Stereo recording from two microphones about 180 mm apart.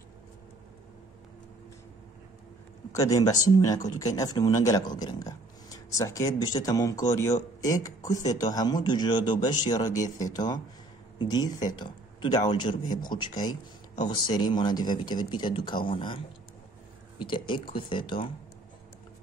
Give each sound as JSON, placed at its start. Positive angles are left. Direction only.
{"t": 2.9, "sound": "speech", "side_deg": 20}
{"t": 17.3, "sound": "speech", "side_deg": 25}